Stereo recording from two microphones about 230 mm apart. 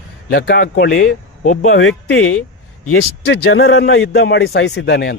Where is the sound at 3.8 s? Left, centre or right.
Left.